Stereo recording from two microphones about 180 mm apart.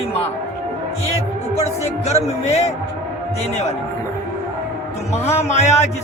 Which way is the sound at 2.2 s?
35° left (ahead or behind).